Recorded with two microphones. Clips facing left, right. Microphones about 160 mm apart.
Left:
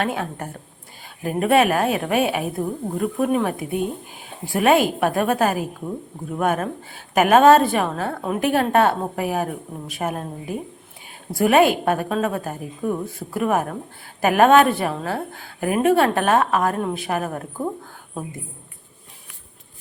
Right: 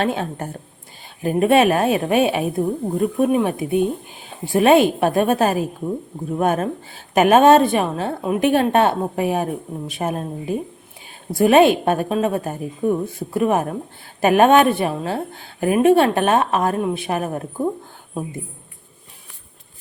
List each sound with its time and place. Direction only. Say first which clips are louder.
0.0 s a woman's voice: right 3 dB; 25° right (ahead or behind)